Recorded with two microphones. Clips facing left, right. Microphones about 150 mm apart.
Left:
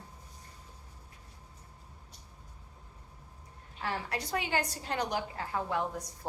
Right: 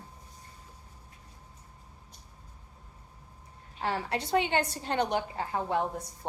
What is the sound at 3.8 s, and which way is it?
A woman's voice, 25° right (ahead or behind).